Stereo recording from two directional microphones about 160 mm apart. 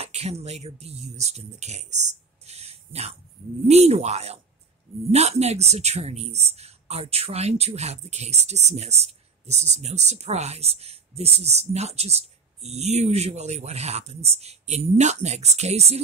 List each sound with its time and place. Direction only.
0.0 s speech: 40° right (ahead or behind)